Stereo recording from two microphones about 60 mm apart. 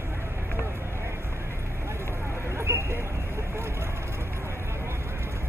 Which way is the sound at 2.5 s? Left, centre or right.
Right.